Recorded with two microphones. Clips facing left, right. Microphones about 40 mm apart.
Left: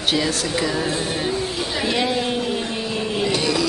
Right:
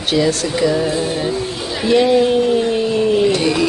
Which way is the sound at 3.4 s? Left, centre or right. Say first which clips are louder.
Right 5 dB; right.